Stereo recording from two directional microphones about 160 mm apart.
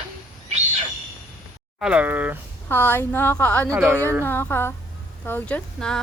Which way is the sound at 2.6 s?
15° left (ahead or behind).